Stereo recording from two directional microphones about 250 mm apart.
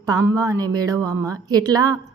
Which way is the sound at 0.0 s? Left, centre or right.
Centre.